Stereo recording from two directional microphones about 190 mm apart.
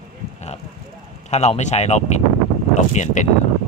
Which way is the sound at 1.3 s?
35° left (ahead or behind).